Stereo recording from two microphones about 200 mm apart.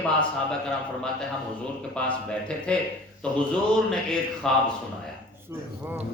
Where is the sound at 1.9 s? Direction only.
5° left (ahead or behind).